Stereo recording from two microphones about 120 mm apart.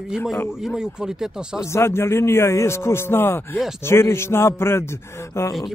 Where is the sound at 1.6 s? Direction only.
20° left (ahead or behind).